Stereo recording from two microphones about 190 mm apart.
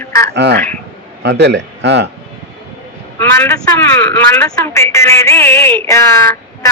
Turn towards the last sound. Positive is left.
turn(degrees=15)  # may be behind; listen again after turning